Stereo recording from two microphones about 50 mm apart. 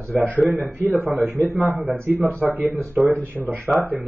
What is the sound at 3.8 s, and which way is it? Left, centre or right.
Speech, right.